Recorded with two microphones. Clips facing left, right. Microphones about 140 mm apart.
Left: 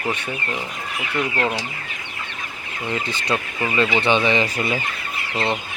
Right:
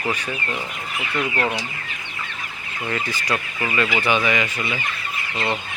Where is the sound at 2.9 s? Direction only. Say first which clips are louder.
Left 1 dB; 20° left (ahead or behind).